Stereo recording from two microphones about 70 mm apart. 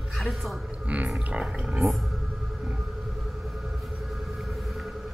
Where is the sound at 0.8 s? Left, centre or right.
Centre.